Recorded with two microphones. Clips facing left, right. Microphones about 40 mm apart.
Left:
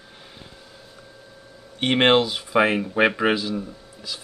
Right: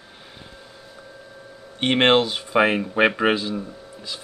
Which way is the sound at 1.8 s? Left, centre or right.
Centre.